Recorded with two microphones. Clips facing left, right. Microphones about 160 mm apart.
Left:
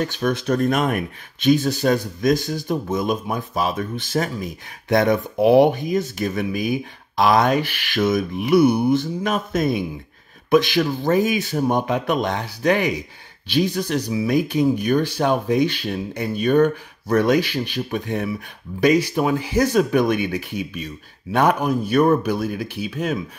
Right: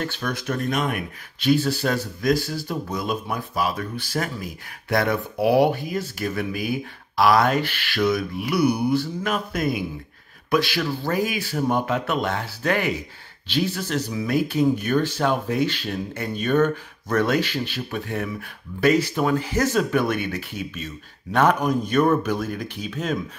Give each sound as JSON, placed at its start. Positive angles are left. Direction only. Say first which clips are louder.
{"t": 0.0, "sound": "speech", "louder": "left 6 dB", "side_deg": 20}
{"t": 0.7, "sound": "speech", "louder": "left 2 dB", "side_deg": 45}
{"t": 1.4, "sound": "speech", "louder": "left 3 dB", "side_deg": 20}